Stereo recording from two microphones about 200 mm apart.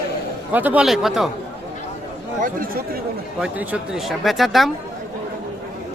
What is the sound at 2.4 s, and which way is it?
Speech, 45° right (ahead or behind).